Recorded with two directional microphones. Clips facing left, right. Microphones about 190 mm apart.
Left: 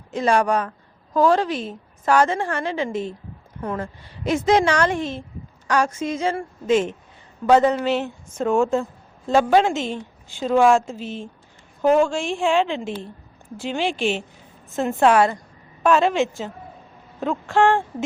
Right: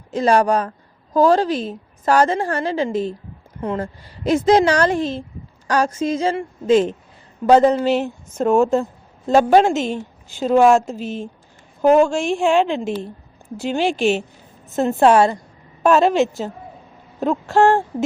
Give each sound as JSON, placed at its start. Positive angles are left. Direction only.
{"t": 0.1, "sound": "a woman's voice", "side_deg": -35}
{"t": 15.8, "sound": "a woman's voice", "side_deg": -40}